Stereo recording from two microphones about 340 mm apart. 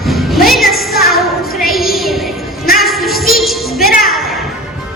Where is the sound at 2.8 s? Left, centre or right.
Centre.